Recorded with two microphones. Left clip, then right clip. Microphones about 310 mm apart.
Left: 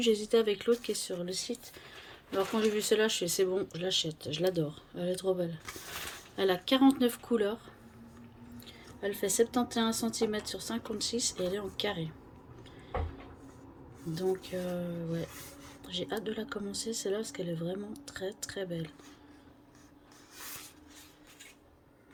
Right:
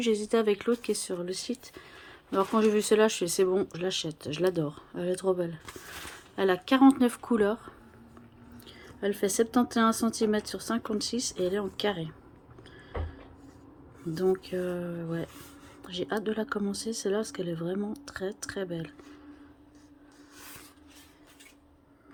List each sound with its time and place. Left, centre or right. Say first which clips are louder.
0.0 s speech: right 1 dB; centre
14.1 s speech: right 5 dB; centre